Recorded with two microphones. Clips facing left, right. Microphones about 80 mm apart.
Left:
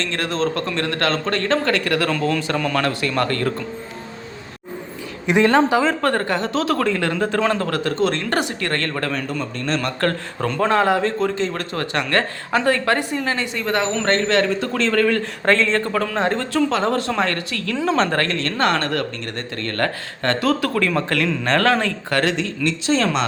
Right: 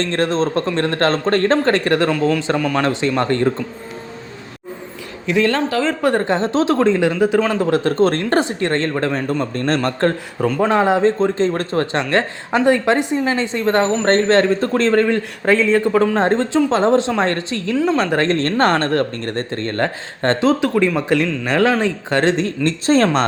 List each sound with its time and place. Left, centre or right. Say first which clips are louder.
0.0 s speech: right 4 dB; right
5.2 s speech: left 2 dB; centre
6.0 s speech: right 3 dB; centre
7.1 s speech: right 3 dB; centre
7.9 s speech: right 5 dB; right
10.4 s speech: right 3 dB; centre
10.7 s speech: right 3 dB; right
15.4 s speech: right 4 dB; centre
16.0 s speech: right 5 dB; right
17.7 s speech: right 2 dB; centre
18.2 s speech: right 5 dB; right; by 22.2 s centre
22.2 s speech: right 5 dB; right